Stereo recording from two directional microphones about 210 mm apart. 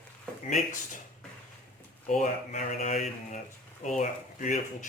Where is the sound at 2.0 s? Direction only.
35° left (ahead or behind).